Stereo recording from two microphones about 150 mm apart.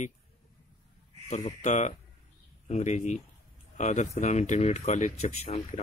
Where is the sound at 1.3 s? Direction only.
45° left (ahead or behind).